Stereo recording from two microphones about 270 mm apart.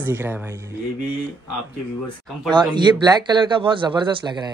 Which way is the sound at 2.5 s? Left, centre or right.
Centre.